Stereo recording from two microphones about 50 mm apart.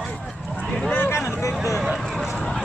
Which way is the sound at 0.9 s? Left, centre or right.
Left.